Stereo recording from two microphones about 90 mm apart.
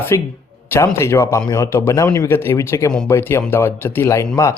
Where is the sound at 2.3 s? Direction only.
25° left (ahead or behind).